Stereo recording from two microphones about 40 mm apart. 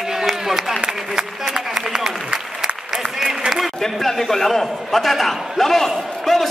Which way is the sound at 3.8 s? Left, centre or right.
Centre.